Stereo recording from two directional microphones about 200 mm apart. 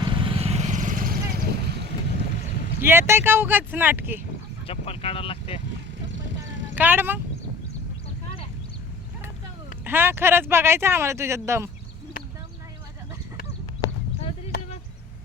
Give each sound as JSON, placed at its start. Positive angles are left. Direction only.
{"t": 0.0, "sound": "vehicle", "side_deg": -25}
{"t": 2.8, "sound": "speech", "side_deg": -10}
{"t": 4.6, "sound": "speech", "side_deg": 30}
{"t": 6.7, "sound": "speech", "side_deg": -10}
{"t": 9.8, "sound": "speech", "side_deg": -10}